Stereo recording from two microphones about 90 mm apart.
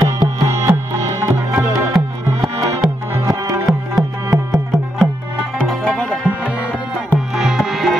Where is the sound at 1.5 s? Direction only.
5° right (ahead or behind).